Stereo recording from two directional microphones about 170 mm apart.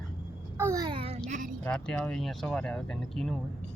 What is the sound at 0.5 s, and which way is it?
Babbling, 15° right (ahead or behind).